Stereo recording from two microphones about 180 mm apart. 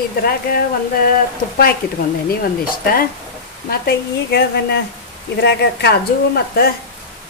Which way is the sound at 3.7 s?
60° left (ahead or behind).